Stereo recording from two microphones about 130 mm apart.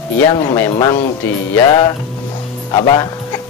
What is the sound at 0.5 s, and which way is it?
Speech, 20° left (ahead or behind).